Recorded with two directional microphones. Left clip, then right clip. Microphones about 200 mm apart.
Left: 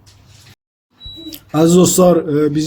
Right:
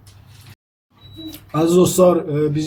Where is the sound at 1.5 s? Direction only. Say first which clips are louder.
Left 3 dB; 40° left (ahead or behind).